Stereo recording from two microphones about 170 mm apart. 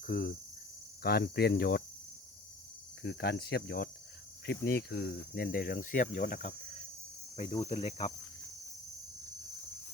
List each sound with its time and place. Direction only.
0.0 s cricket: 55° left (ahead or behind)
1.0 s cricket: 65° left (ahead or behind)
3.0 s cricket: 80° left
4.4 s speech: 65° left (ahead or behind); by 6.1 s 50° left (ahead or behind)
7.3 s cricket: 35° left (ahead or behind)